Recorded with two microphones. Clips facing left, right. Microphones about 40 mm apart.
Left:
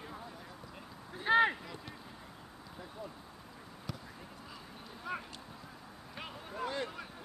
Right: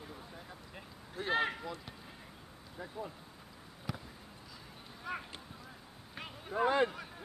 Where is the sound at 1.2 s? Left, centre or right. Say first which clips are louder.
Left 5 dB; centre.